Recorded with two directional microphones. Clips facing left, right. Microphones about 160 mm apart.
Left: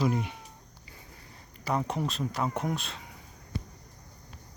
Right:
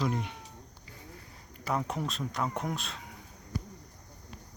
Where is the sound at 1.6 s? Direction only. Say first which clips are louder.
Left 2 dB; centre (ahead or behind).